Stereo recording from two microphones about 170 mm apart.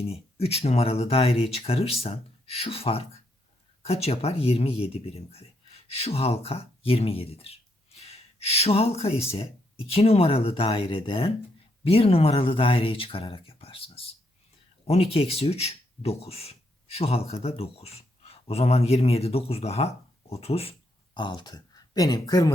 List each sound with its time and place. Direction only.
0.0 s speech: 35° left (ahead or behind)